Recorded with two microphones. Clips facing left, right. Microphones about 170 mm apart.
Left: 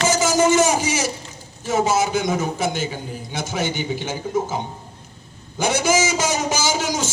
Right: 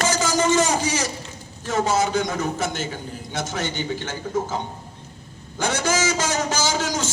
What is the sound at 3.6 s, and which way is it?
A man's voice, 10° left (ahead or behind).